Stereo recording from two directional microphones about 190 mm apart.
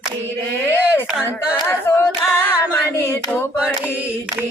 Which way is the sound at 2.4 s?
10° left (ahead or behind).